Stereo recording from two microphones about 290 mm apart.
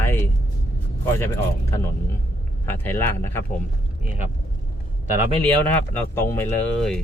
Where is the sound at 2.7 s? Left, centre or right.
Centre.